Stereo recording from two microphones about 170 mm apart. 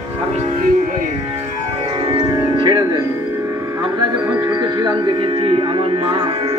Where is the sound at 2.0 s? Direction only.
30° right (ahead or behind).